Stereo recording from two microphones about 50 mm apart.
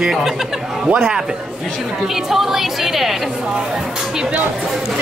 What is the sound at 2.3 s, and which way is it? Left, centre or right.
Speech, centre.